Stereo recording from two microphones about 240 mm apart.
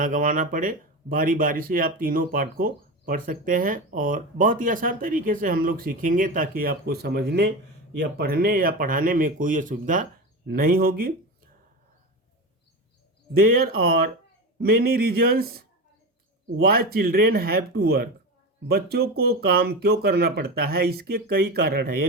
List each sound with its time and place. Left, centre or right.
0.0 s speech: right
13.3 s speech: right
16.6 s speech: right